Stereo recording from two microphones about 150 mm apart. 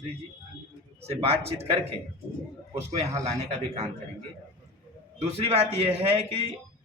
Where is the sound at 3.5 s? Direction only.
45° right (ahead or behind).